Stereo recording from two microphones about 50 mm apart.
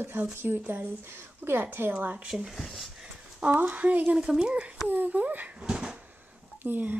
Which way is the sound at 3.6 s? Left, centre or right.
Right.